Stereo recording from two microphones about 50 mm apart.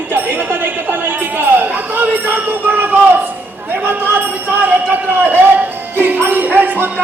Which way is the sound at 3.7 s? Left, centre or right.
Right.